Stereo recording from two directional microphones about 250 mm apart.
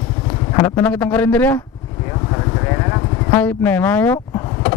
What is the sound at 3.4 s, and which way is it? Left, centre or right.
Speech, centre.